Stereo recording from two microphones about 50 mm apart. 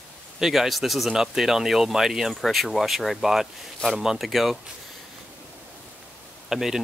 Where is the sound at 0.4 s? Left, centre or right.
Centre.